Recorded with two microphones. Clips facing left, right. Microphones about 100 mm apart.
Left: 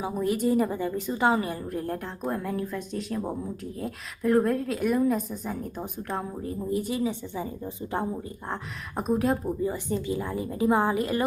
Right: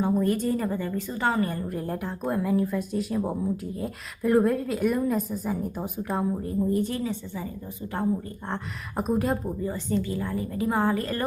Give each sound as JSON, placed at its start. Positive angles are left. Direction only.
{"t": 0.0, "sound": "a woman's voice", "side_deg": 5}
{"t": 8.4, "sound": "a woman's voice", "side_deg": 0}
{"t": 9.6, "sound": "a woman's voice", "side_deg": 15}